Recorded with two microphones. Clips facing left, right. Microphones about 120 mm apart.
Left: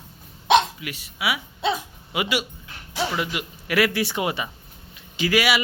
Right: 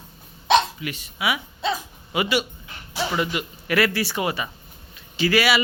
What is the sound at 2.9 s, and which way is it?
Speech, 5° left (ahead or behind).